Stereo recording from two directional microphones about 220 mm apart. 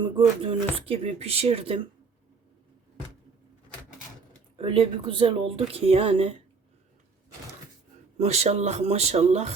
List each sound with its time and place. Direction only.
0.0 s speech: 25° right (ahead or behind)
4.5 s speech: 25° right (ahead or behind)
8.2 s speech: 30° right (ahead or behind)